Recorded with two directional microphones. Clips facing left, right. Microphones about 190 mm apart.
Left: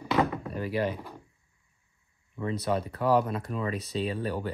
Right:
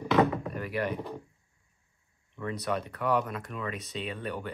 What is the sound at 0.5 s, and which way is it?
Speech, 30° left (ahead or behind).